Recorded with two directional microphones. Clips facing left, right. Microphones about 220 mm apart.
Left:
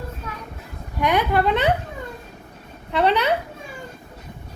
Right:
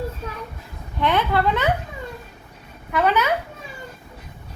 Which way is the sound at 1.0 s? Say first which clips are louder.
Left 1 dB; 15° left (ahead or behind).